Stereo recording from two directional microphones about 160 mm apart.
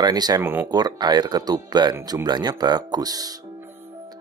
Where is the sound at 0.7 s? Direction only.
25° right (ahead or behind).